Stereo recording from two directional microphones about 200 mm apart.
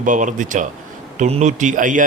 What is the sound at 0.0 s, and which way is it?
A man's voice, 40° right (ahead or behind).